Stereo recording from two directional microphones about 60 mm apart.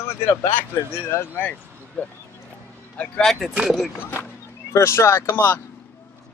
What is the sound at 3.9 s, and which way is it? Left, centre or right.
Speech, left.